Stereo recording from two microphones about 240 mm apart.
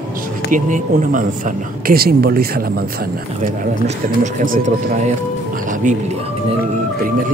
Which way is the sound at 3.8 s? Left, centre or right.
Right.